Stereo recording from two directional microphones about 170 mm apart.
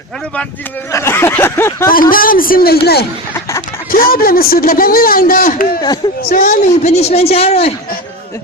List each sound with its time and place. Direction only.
0.9 s speech: 15° left (ahead or behind)
1.9 s a man's voice: 55° left (ahead or behind)
3.9 s a man's voice: 60° left (ahead or behind); by 7.6 s 35° left (ahead or behind)